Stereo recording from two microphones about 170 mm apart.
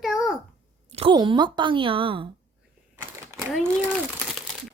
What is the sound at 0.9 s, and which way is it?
Speech, 30° right (ahead or behind).